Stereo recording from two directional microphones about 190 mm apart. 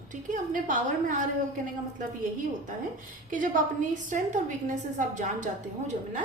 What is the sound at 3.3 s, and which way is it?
A woman's voice, 45° right (ahead or behind).